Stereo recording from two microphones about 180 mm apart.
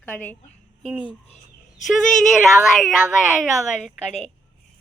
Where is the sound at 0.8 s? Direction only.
5° right (ahead or behind).